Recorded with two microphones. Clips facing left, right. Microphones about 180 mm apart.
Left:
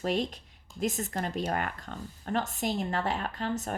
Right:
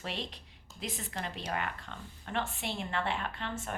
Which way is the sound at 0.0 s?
45° left (ahead or behind).